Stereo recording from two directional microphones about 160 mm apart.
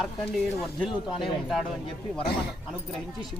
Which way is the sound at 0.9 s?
30° left (ahead or behind).